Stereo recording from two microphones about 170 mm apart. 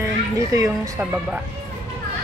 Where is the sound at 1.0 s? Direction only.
5° right (ahead or behind).